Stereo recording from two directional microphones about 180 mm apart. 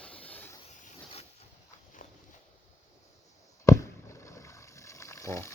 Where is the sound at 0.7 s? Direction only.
40° left (ahead or behind).